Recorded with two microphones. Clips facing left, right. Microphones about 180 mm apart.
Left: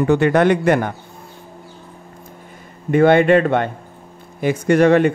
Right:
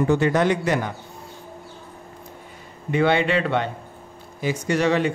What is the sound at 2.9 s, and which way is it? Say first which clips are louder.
Speech: left 8 dB; 50° left (ahead or behind).